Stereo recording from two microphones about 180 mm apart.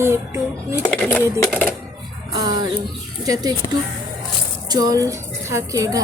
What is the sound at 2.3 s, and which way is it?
Speech, 25° right (ahead or behind).